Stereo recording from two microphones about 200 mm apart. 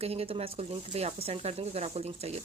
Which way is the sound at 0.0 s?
30° right (ahead or behind).